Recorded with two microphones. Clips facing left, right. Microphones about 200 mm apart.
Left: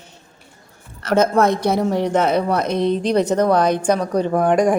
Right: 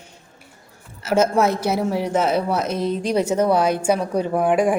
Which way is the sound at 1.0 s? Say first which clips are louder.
Left 2 dB; 5° right (ahead or behind).